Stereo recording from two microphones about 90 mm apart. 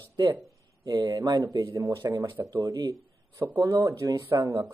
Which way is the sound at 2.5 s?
50° right (ahead or behind).